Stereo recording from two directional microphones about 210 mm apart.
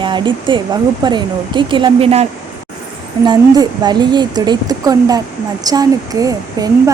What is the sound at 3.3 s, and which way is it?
Speech, 20° right (ahead or behind).